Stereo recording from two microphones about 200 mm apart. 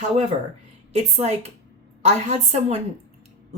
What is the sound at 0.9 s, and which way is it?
Speech, 30° right (ahead or behind).